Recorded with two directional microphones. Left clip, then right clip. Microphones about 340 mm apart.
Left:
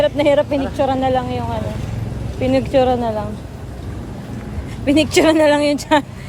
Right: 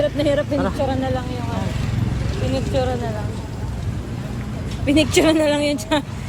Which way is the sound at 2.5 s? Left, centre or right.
Left.